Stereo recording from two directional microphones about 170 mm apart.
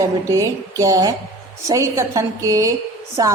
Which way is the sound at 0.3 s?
20° right (ahead or behind).